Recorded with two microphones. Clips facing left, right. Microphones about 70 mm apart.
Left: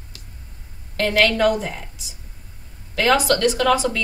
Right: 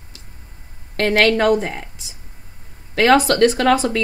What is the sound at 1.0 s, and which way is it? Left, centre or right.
Speech, right.